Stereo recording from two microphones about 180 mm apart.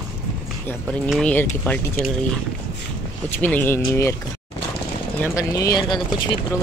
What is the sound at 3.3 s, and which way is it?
Speech, 10° left (ahead or behind).